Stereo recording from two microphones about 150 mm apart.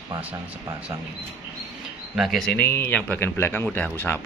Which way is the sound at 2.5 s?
15° left (ahead or behind).